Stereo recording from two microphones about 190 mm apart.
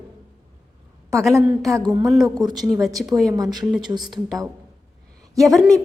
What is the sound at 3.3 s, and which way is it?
Speech, 20° right (ahead or behind).